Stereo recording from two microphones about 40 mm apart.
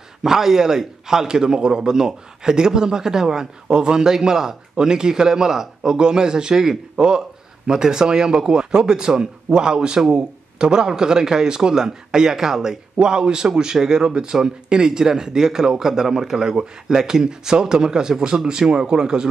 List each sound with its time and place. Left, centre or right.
0.2 s a man's voice: centre